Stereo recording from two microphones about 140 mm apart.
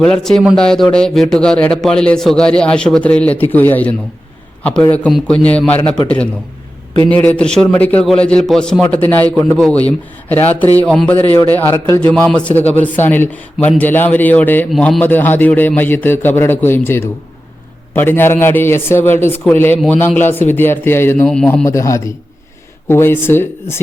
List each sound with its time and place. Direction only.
0.0 s a man's voice: 5° left (ahead or behind)
7.1 s speech: 10° left (ahead or behind)
21.7 s a man's voice: 20° left (ahead or behind)